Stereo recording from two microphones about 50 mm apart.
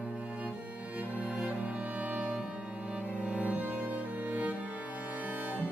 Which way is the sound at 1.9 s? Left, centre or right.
Right.